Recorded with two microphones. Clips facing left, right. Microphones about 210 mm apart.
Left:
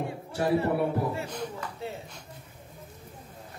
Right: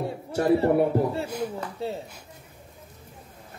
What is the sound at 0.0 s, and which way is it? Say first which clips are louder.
Speech: right 4 dB; 40° right (ahead or behind).